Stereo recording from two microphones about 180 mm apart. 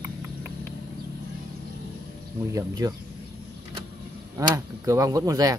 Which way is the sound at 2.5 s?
20° right (ahead or behind).